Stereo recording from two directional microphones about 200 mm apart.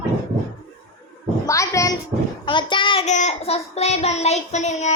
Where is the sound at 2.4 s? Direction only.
25° left (ahead or behind).